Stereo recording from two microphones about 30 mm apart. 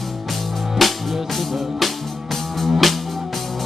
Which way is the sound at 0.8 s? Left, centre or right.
Centre.